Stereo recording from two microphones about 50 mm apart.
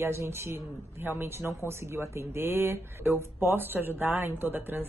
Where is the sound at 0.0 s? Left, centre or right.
Right.